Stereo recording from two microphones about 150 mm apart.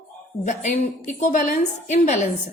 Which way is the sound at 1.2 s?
55° left (ahead or behind).